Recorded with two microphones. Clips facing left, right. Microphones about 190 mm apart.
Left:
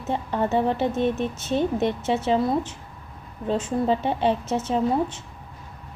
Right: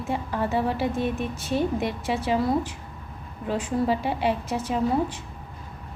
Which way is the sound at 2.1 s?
25° left (ahead or behind).